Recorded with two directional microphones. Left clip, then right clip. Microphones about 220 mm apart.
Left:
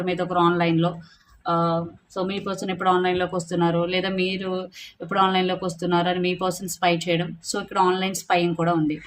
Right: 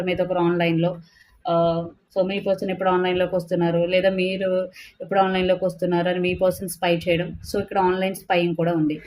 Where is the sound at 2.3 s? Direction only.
20° left (ahead or behind).